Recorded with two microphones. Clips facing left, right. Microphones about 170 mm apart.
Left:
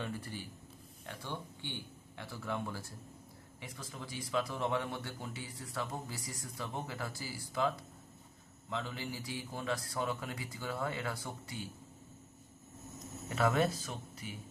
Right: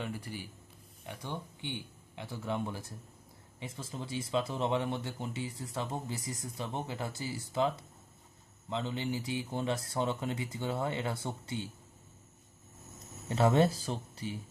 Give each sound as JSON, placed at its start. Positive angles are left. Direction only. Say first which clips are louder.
{"t": 0.0, "sound": "speech", "louder": "right 2 dB", "side_deg": -15}
{"t": 13.3, "sound": "speech", "louder": "right 4 dB", "side_deg": -30}